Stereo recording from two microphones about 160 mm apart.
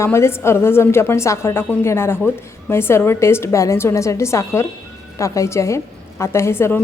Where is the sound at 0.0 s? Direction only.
15° left (ahead or behind).